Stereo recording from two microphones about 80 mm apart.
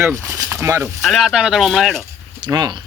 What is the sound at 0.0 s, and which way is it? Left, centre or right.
Speech, right.